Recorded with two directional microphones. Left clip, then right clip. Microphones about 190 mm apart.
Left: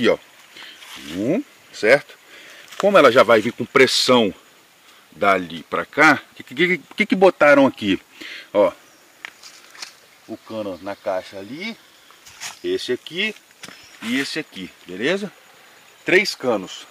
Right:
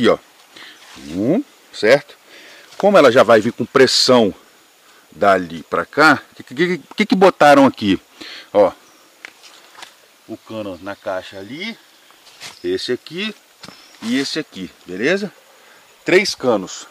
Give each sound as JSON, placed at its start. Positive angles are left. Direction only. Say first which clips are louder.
{"t": 0.0, "sound": "a sound", "louder": "right 3 dB", "side_deg": 0}
{"t": 2.8, "sound": "speech", "louder": "right 2 dB", "side_deg": 0}
{"t": 7.0, "sound": "speech", "louder": "right 3 dB", "side_deg": -20}
{"t": 10.5, "sound": "speech", "louder": "even", "side_deg": 20}
{"t": 12.6, "sound": "speech", "louder": "right 2 dB", "side_deg": 0}
{"t": 15.0, "sound": "speech", "louder": "right 4 dB", "side_deg": 15}
{"t": 16.0, "sound": "speech", "louder": "right 2 dB", "side_deg": 0}